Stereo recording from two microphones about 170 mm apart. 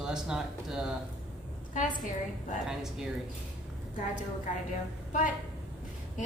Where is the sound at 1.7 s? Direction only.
45° left (ahead or behind).